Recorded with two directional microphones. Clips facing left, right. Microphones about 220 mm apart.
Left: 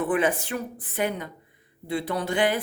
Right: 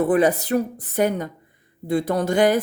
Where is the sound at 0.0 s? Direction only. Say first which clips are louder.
Right 6 dB; 40° right (ahead or behind).